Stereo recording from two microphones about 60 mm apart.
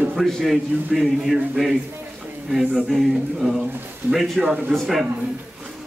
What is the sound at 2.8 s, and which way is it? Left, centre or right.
A man's voice, centre.